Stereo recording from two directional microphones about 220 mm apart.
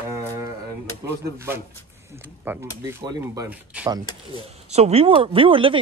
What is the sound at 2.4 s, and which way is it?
Speech, 10° right (ahead or behind).